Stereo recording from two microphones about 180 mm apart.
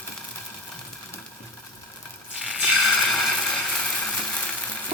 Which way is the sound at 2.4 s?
Centre (ahead or behind).